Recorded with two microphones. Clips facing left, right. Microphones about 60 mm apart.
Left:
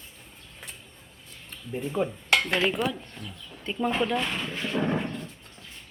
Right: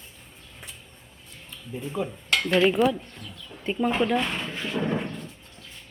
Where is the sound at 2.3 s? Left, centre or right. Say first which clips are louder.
Even; left.